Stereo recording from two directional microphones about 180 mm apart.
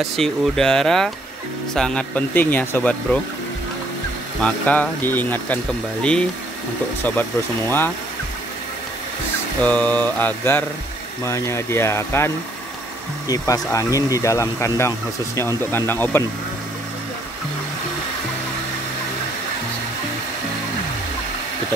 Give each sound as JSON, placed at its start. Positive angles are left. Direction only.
{"t": 0.0, "sound": "speech", "side_deg": 0}
{"t": 4.4, "sound": "speech", "side_deg": 5}
{"t": 7.0, "sound": "speech", "side_deg": 10}
{"t": 9.6, "sound": "speech", "side_deg": 10}
{"t": 13.3, "sound": "speech", "side_deg": 20}